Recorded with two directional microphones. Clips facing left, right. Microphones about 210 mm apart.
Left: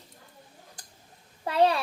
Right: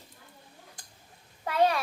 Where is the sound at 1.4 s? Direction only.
30° left (ahead or behind).